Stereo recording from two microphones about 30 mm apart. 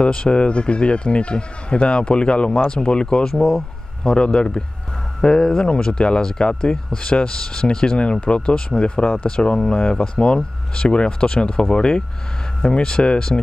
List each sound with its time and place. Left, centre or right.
0.0 s speech: left
3.3 s speech: centre
4.0 s speech: left
5.2 s speech: centre
5.6 s speech: left